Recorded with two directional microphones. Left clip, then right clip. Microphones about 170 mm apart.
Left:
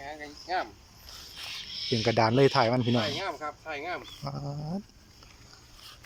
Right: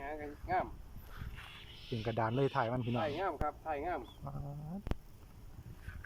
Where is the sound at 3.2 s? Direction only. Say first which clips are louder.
Left 2 dB; 10° right (ahead or behind).